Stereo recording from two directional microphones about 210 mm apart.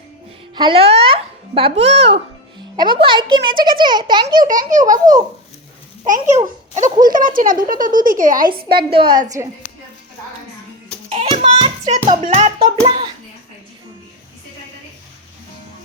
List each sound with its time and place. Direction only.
0.5 s a child's voice: 25° right (ahead or behind)
4.9 s babbling: 15° right (ahead or behind)
6.1 s speech: 35° right (ahead or behind)
9.0 s a child's voice: 20° right (ahead or behind)
11.1 s music: 25° right (ahead or behind)
12.8 s a child's voice: 30° right (ahead or behind)